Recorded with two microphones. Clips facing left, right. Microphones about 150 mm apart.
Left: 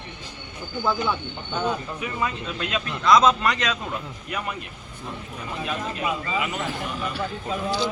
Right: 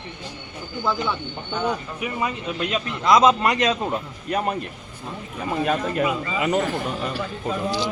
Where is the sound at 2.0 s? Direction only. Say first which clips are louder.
Right 2 dB; 15° right (ahead or behind).